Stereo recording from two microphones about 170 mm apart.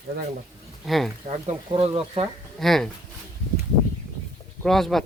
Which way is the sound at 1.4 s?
35° right (ahead or behind).